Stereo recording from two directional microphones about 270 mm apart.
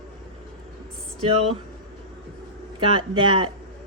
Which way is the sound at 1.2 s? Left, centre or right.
Right.